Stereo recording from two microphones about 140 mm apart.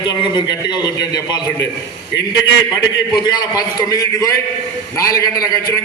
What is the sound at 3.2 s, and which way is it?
A man's voice, 30° left (ahead or behind).